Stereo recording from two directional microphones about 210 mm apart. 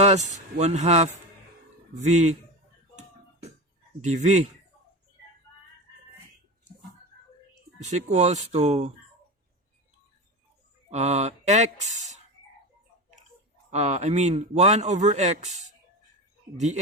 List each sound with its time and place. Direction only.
0.0 s a man's voice: 35° right (ahead or behind)
4.0 s a man's voice: 35° right (ahead or behind)
7.9 s a man's voice: 35° right (ahead or behind)
10.9 s a man's voice: 30° right (ahead or behind)
13.7 s a man's voice: 35° right (ahead or behind)